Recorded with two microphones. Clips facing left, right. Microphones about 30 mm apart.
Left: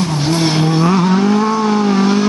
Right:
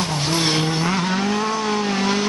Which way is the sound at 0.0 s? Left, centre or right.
Centre.